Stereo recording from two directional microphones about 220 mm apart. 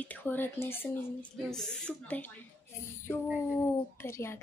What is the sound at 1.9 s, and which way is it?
Speech, 5° left (ahead or behind).